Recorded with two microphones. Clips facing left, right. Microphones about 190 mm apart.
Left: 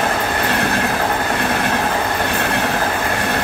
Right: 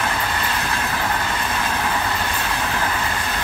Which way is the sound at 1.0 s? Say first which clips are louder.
Left 5 dB; 45° left (ahead or behind).